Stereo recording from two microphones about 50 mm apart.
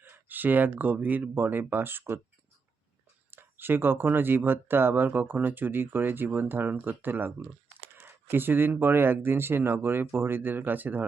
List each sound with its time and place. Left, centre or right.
0.0 s speech: right
3.3 s speech: right
7.9 s a sound: right
8.8 s speech: right